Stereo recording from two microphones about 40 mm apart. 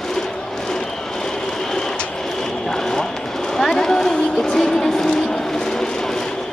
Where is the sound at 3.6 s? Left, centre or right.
Centre.